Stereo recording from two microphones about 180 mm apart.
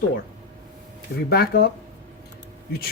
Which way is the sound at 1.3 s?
60° left (ahead or behind).